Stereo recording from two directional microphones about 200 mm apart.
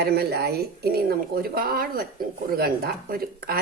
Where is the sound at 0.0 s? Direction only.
55° right (ahead or behind).